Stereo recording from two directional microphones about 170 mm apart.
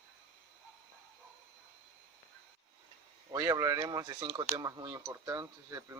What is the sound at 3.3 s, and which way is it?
Speech, 25° right (ahead or behind).